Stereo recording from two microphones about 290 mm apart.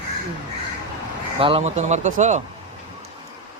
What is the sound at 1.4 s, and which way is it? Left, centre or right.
Speech, centre.